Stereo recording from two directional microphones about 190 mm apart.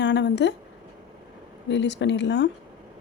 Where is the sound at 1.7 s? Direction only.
65° left (ahead or behind).